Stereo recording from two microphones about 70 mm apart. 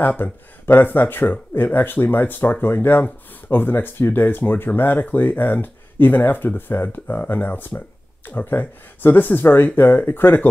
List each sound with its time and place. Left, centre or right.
0.0 s speech: left